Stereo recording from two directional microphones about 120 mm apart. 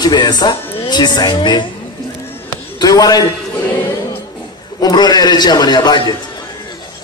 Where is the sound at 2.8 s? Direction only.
30° left (ahead or behind).